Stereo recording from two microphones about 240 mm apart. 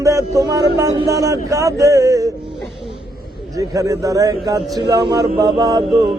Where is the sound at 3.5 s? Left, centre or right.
Centre.